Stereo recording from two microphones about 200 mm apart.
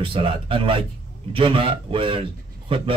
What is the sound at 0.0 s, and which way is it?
A man's voice, 25° right (ahead or behind).